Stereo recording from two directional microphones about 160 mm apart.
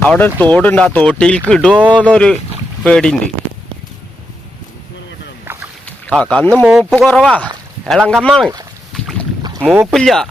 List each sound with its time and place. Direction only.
0.0 s speech: 10° left (ahead or behind)
5.5 s boat: 15° right (ahead or behind)
5.8 s speech: 5° left (ahead or behind)
8.9 s boat: centre (ahead or behind)
9.4 s boat: 20° right (ahead or behind)
9.6 s speech: 10° right (ahead or behind)
9.9 s speech: centre (ahead or behind)